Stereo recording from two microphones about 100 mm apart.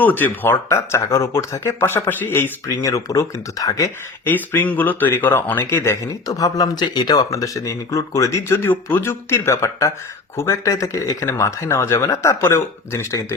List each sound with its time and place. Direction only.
0.0 s speech: 20° left (ahead or behind)
2.8 s speech: 35° left (ahead or behind)
4.3 s speech: 20° left (ahead or behind)
6.2 s speech: 40° left (ahead or behind)